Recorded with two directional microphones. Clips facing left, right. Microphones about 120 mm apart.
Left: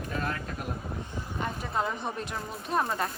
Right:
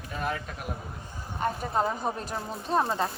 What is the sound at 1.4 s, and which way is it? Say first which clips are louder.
A woman's voice: right 4 dB; 45° right (ahead or behind).